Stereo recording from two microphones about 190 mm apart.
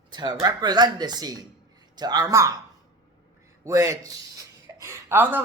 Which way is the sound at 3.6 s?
15° right (ahead or behind).